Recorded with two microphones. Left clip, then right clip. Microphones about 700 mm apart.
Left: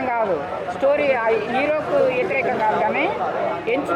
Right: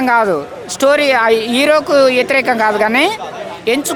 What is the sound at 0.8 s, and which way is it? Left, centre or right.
Speech, right.